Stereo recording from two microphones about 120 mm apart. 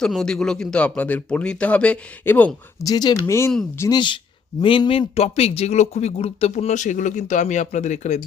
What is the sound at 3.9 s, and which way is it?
Speech, 40° left (ahead or behind).